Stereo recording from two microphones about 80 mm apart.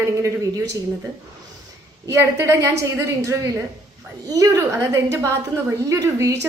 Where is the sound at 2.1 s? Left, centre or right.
Right.